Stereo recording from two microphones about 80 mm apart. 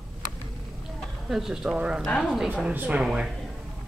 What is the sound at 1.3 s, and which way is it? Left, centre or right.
Speech, centre.